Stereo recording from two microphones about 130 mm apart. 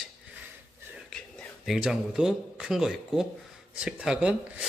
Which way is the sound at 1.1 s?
Centre (ahead or behind).